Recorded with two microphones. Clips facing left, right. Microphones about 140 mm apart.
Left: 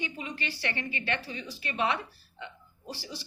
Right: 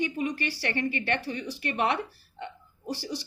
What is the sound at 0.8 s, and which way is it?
A woman's voice, 55° right (ahead or behind).